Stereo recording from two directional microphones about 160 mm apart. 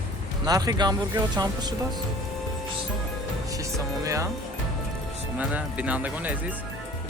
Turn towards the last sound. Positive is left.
turn(degrees=-10)  # may be behind; listen again after turning